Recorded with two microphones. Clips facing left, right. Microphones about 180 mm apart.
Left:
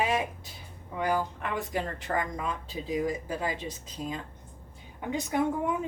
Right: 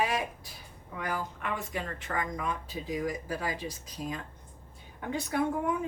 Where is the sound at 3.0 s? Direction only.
20° left (ahead or behind).